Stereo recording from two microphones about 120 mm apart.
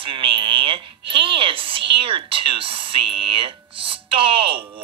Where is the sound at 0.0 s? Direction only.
45° right (ahead or behind).